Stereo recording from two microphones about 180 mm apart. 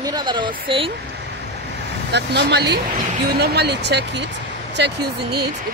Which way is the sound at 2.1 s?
70° right (ahead or behind).